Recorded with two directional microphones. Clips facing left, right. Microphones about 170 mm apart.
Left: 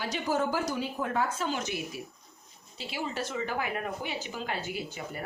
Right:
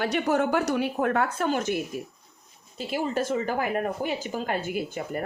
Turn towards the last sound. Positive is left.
turn(degrees=-50)  # may be behind; listen again after turning